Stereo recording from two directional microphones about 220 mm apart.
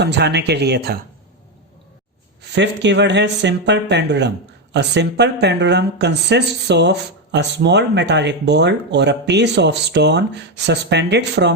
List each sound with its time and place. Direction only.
0.0 s speech: 50° right (ahead or behind)
2.5 s speech: 55° right (ahead or behind)